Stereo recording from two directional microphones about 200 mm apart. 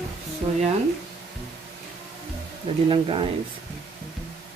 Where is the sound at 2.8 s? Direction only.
25° right (ahead or behind).